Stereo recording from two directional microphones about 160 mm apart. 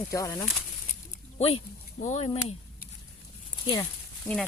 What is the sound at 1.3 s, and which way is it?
Speech, 40° left (ahead or behind).